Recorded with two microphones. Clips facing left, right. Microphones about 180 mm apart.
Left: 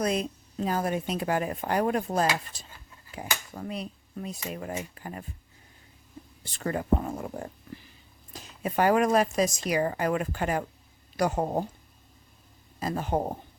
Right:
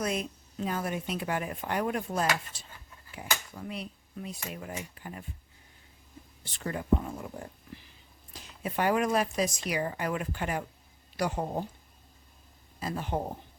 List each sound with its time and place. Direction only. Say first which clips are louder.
0.0 s speech: left 4 dB; 35° left (ahead or behind)
6.4 s speech: left 5 dB; 50° left (ahead or behind)
12.8 s speech: left 4 dB; 45° left (ahead or behind)